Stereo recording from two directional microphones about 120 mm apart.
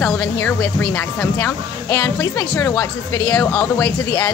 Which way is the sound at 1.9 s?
30° left (ahead or behind).